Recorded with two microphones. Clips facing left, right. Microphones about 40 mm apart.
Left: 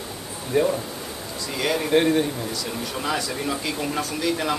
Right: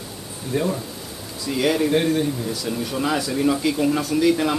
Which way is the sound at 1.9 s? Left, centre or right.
Centre.